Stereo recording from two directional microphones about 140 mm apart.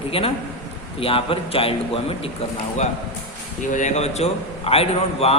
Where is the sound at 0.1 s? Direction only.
45° left (ahead or behind).